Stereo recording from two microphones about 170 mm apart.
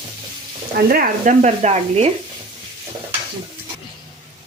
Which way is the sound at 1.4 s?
40° right (ahead or behind).